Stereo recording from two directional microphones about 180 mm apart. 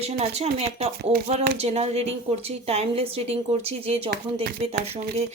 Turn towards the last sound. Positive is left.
turn(degrees=-35)  # may be behind; listen again after turning